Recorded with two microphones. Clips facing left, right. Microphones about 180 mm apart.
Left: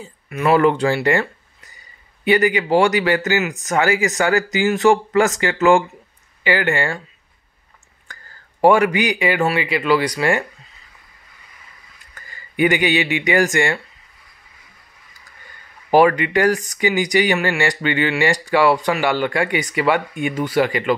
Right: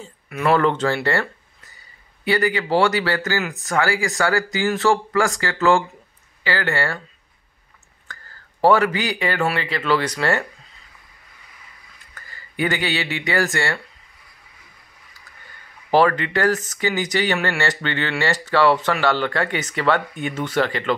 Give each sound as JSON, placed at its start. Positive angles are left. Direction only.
{"t": 0.0, "sound": "speech", "side_deg": 5}
{"t": 2.2, "sound": "speech", "side_deg": 20}
{"t": 8.1, "sound": "speech", "side_deg": 15}
{"t": 12.3, "sound": "speech", "side_deg": 15}
{"t": 15.9, "sound": "speech", "side_deg": 15}